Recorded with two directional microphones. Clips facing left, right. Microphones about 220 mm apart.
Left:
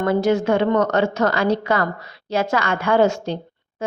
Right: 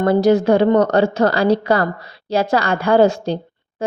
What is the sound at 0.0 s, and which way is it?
Speech, 35° right (ahead or behind).